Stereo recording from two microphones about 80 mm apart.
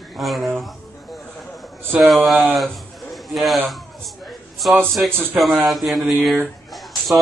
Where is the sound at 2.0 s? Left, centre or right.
Centre.